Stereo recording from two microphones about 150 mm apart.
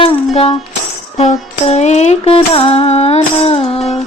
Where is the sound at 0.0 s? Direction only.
40° left (ahead or behind).